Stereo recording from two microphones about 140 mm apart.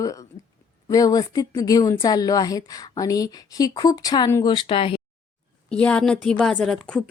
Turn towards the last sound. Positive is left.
turn(degrees=5)  # may be behind; listen again after turning